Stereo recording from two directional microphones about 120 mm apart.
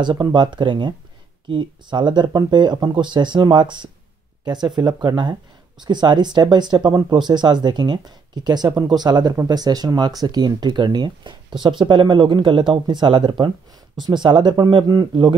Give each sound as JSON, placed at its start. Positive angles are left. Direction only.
{"t": 0.0, "sound": "speech", "side_deg": -40}